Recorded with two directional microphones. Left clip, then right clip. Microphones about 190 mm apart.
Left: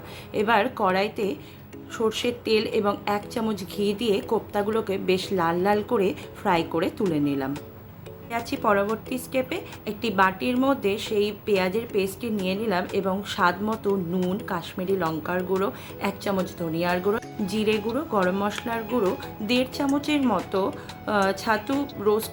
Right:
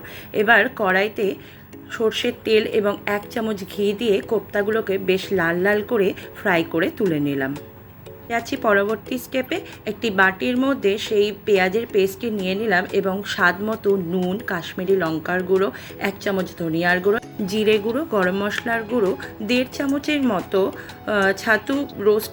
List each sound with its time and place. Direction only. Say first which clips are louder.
0.3 s a woman's voice: right 6 dB; 5° right (ahead or behind)